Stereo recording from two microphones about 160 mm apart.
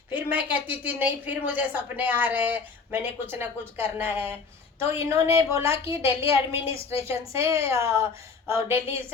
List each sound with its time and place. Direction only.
0.1 s a woman's voice: 10° right (ahead or behind)